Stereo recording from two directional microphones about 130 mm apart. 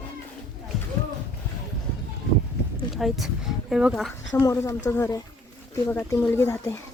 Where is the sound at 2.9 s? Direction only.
Centre (ahead or behind).